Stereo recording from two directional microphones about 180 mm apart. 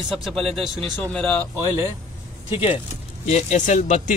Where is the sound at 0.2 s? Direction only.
Centre (ahead or behind).